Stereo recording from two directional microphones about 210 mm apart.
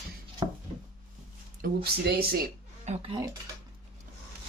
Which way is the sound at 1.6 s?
45° right (ahead or behind).